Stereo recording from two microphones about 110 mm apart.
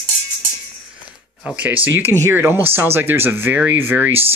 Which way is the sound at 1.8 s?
25° right (ahead or behind).